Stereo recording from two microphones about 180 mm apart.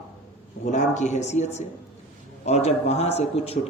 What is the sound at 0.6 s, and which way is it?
A man's voice, 40° left (ahead or behind).